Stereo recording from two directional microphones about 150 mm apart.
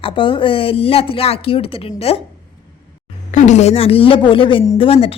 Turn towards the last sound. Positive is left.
turn(degrees=40)  # may be behind; listen again after turning